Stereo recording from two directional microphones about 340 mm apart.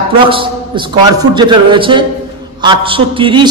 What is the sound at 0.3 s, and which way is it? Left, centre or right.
A man's voice, centre.